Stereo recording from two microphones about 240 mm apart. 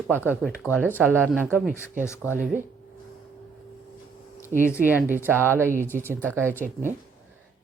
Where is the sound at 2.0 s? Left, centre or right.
Centre.